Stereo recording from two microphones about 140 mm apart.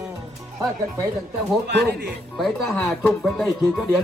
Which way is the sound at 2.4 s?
Centre (ahead or behind).